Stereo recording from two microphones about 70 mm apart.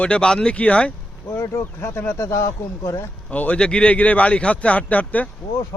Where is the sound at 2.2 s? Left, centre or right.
Left.